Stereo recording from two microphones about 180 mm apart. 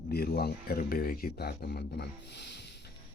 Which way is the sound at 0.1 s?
60° left (ahead or behind).